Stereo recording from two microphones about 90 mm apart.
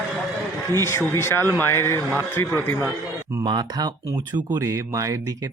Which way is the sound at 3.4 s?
50° right (ahead or behind).